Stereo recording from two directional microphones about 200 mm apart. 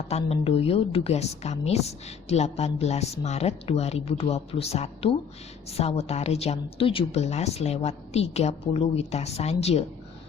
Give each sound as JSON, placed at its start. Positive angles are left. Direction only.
{"t": 0.1, "sound": "a woman's voice", "side_deg": 30}